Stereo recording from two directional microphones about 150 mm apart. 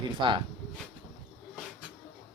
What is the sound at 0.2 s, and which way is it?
Speech, 35° right (ahead or behind).